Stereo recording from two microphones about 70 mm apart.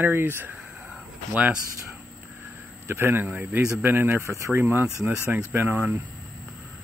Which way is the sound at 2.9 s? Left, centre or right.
Right.